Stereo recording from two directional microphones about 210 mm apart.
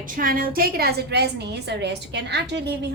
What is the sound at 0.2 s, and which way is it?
A woman's voice, 45° right (ahead or behind).